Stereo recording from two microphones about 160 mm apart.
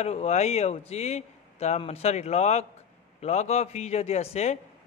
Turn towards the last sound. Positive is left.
turn(degrees=45)  # may be behind; listen again after turning